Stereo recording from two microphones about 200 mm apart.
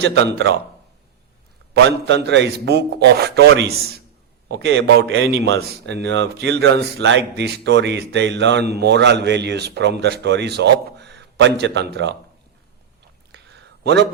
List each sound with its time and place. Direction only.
0.0 s a man's voice: 60° right (ahead or behind)
1.7 s a man's voice: 55° right (ahead or behind)
13.8 s a man's voice: 55° right (ahead or behind)